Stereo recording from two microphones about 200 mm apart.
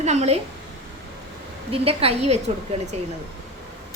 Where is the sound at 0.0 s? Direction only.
35° right (ahead or behind).